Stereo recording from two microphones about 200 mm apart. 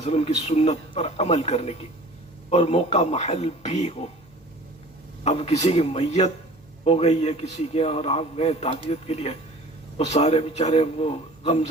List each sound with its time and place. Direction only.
0.0 s a man's voice: 30° left (ahead or behind)
5.2 s a man's voice: 30° left (ahead or behind)